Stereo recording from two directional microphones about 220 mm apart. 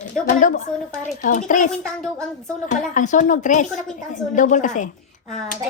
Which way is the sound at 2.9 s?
35° left (ahead or behind).